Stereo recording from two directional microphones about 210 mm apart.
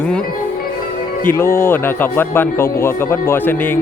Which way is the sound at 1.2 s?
10° left (ahead or behind).